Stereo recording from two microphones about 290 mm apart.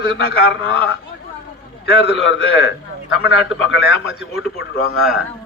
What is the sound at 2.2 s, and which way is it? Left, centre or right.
A man's voice, left.